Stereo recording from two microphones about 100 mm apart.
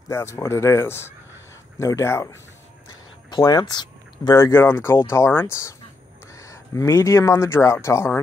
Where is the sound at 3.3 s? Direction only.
50° left (ahead or behind).